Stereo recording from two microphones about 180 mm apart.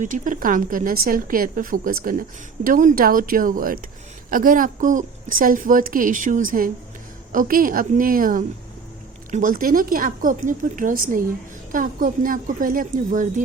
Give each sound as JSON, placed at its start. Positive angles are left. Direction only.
{"t": 0.0, "sound": "a woman's voice", "side_deg": -45}